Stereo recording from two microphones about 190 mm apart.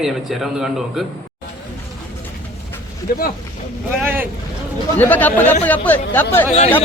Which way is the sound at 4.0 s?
10° right (ahead or behind).